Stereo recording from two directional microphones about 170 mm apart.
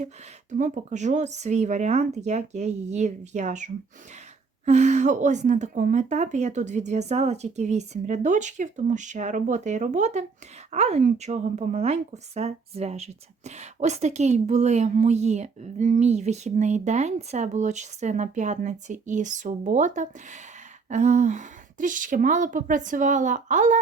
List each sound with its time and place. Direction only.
0.5 s speech: 45° right (ahead or behind)